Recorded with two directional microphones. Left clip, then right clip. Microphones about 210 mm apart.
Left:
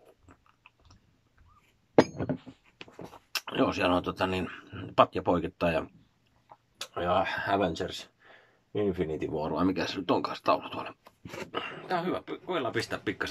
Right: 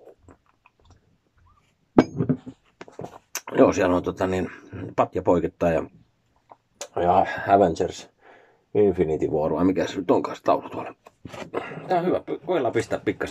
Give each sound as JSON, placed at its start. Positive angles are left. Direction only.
{"t": 3.4, "sound": "speech", "side_deg": 10}
{"t": 6.9, "sound": "speech", "side_deg": 0}